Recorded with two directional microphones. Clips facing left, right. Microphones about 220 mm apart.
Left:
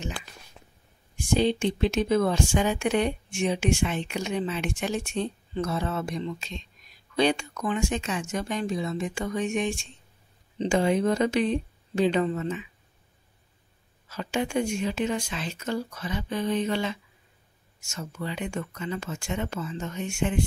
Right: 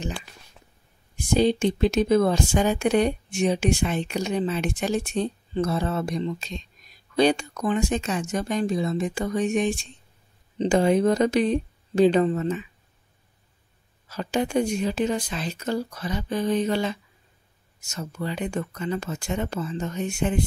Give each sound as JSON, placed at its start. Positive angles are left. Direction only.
{"t": 1.1, "sound": "speech", "side_deg": -40}
{"t": 14.0, "sound": "speech", "side_deg": -40}